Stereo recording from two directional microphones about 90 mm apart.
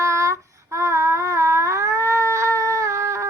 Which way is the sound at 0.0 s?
35° right (ahead or behind).